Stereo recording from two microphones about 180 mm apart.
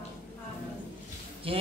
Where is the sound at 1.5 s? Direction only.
30° right (ahead or behind).